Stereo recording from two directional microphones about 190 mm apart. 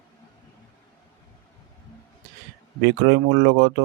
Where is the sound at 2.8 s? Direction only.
65° right (ahead or behind).